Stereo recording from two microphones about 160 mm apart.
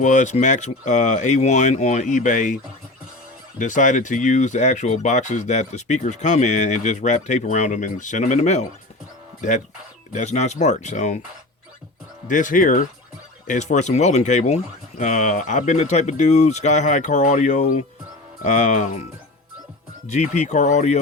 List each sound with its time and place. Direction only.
0.0 s speech: 50° left (ahead or behind)
3.6 s speech: 50° left (ahead or behind)
10.1 s speech: 50° left (ahead or behind)
12.3 s speech: 55° left (ahead or behind)
20.1 s speech: 45° left (ahead or behind)